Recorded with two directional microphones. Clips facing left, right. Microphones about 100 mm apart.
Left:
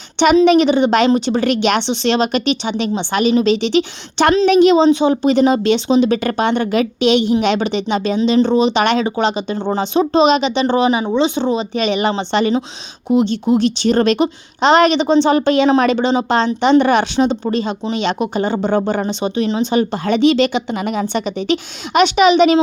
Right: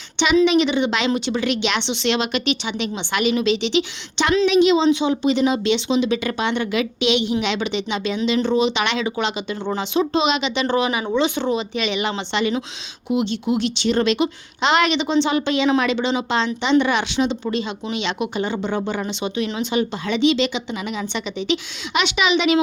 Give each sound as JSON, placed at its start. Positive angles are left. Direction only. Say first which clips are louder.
{"t": 0.4, "sound": "speech", "louder": "left 6 dB", "side_deg": 45}
{"t": 11.5, "sound": "speech", "louder": "left 5 dB", "side_deg": 40}